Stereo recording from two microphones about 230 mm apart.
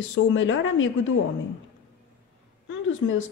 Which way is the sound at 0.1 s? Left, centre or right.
Left.